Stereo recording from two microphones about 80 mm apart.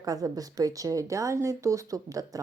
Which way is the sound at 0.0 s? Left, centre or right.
Right.